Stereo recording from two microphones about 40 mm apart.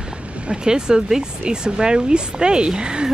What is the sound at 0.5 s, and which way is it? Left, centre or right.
Speech, centre.